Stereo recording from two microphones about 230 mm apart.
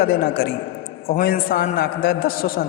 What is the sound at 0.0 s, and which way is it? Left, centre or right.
A man's voice, left.